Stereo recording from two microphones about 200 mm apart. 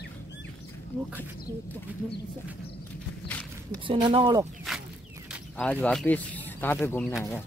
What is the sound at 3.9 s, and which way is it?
Speech, 25° right (ahead or behind).